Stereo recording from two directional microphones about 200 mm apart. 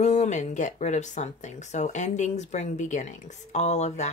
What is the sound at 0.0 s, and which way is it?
Speech, 35° left (ahead or behind).